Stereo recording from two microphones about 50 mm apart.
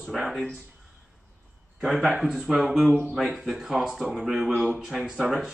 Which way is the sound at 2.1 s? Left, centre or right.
Centre.